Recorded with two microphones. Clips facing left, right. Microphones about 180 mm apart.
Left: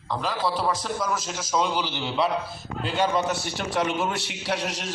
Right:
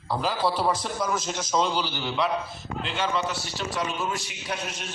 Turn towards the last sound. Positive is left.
turn(degrees=85)